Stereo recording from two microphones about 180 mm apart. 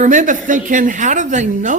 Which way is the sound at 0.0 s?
45° right (ahead or behind).